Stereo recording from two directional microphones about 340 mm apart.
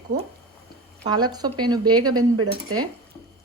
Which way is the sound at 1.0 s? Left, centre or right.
Centre.